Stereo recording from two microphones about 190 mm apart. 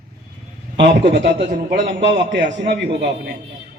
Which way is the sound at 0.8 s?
65° right (ahead or behind).